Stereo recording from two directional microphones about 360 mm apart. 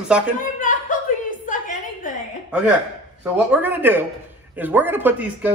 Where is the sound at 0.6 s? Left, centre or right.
Left.